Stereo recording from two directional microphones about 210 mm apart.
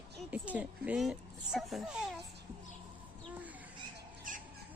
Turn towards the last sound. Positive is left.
turn(degrees=-40)  # may be behind; listen again after turning